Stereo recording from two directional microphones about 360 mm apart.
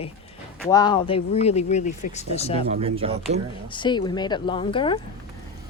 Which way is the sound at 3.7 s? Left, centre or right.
Centre.